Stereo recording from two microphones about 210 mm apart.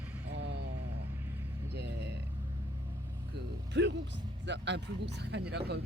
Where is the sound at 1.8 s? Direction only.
55° right (ahead or behind).